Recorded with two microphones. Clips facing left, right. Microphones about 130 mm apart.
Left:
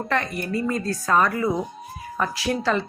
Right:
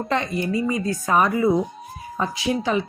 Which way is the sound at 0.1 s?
20° right (ahead or behind).